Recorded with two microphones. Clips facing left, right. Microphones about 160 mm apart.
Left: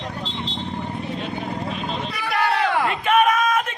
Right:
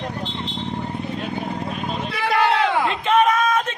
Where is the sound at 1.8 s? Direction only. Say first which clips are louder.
Right 1 dB; 10° right (ahead or behind).